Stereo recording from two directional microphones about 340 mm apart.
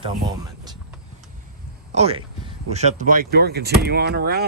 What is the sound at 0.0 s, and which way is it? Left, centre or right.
Speech, centre.